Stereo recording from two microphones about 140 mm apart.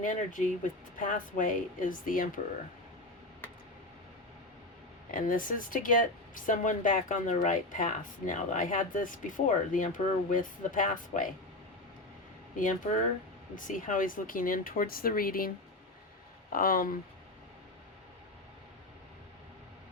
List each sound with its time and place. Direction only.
0.0 s speech: 70° left (ahead or behind)
5.1 s speech: 75° left (ahead or behind)
12.5 s speech: 65° left (ahead or behind); by 17.0 s 90° left